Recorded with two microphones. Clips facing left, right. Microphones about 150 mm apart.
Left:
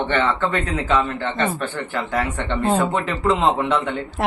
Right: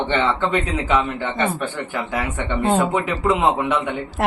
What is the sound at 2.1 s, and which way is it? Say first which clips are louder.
A man's voice: left 1 dB; centre (ahead or behind).